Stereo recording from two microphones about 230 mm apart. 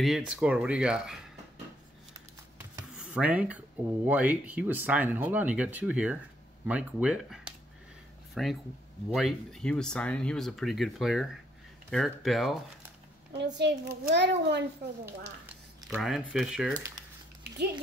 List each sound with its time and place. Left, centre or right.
0.0 s speech: centre
2.7 s speech: centre
13.6 s a child's voice: right
15.9 s speech: centre